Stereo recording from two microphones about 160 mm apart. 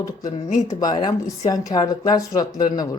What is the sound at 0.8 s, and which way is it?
Speech, 25° left (ahead or behind).